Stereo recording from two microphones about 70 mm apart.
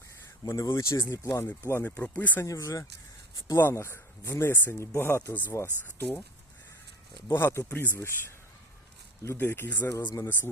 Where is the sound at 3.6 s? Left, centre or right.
Left.